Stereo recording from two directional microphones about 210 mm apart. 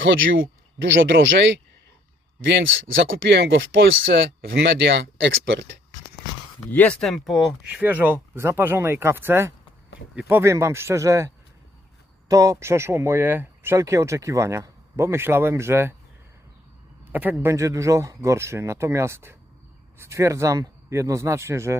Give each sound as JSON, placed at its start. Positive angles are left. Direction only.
{"t": 0.0, "sound": "speech", "side_deg": -65}
{"t": 6.7, "sound": "speech", "side_deg": 5}
{"t": 12.3, "sound": "speech", "side_deg": -15}
{"t": 17.1, "sound": "speech", "side_deg": -10}